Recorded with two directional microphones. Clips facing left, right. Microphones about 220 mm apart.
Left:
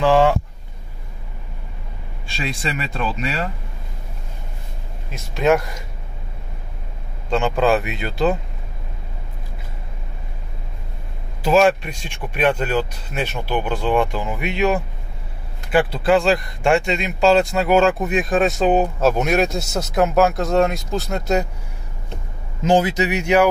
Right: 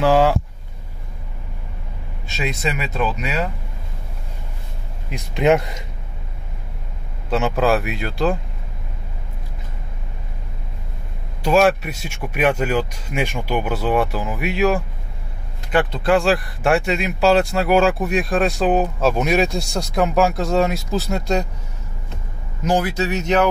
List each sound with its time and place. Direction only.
0.0 s speech: 5° right (ahead or behind)
2.7 s speech: 5° right (ahead or behind)
5.1 s speech: 15° right (ahead or behind)
7.2 s speech: 5° right (ahead or behind)
11.4 s speech: centre (ahead or behind)
22.6 s speech: 25° left (ahead or behind)